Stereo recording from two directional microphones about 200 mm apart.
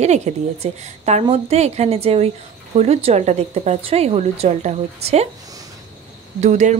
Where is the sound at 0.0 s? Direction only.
35° right (ahead or behind).